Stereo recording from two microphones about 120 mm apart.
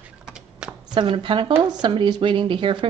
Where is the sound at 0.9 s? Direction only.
40° right (ahead or behind).